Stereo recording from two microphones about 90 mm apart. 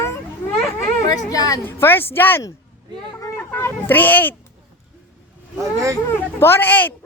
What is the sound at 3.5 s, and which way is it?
Speech, 25° left (ahead or behind).